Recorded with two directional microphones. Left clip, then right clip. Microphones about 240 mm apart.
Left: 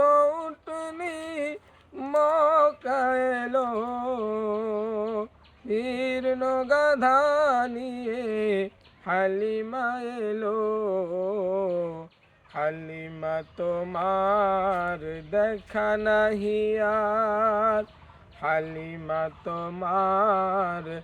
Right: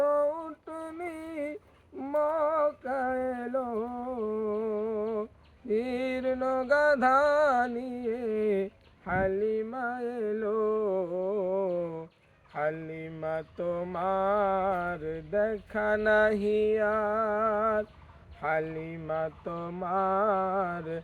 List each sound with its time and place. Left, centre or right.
0.0 s a sound: left
2.0 s female singing: left
5.8 s music: left
9.0 s a sound: left
12.5 s mantra: left
18.3 s a man's voice: left
19.0 s mantra: left